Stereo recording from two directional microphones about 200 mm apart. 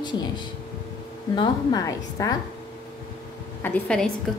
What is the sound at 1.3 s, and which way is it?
A woman's voice, 20° left (ahead or behind).